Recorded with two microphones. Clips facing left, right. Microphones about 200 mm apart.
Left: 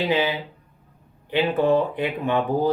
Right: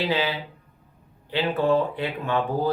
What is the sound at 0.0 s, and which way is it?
Speech, 15° left (ahead or behind).